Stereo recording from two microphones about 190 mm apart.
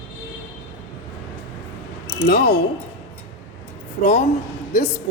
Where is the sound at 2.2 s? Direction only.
50° left (ahead or behind).